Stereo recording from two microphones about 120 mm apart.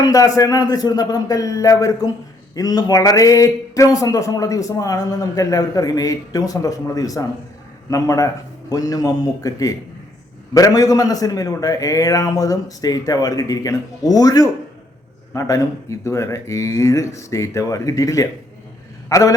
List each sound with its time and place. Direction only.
0.0 s a man's voice: 30° left (ahead or behind)